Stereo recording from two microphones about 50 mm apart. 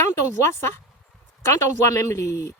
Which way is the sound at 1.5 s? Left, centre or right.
Left.